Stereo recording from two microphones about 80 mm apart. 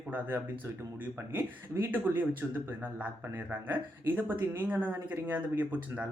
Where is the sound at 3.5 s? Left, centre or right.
Right.